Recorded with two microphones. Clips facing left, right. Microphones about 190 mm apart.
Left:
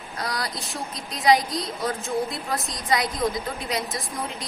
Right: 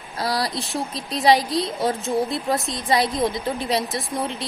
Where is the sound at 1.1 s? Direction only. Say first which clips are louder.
Right 3 dB; 30° right (ahead or behind).